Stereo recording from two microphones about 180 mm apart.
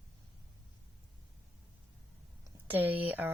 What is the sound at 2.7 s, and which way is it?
Speech, 10° right (ahead or behind).